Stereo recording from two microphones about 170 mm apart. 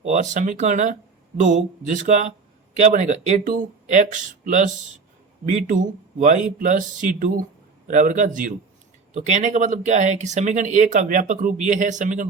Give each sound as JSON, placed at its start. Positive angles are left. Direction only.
{"t": 0.0, "sound": "speech", "side_deg": -45}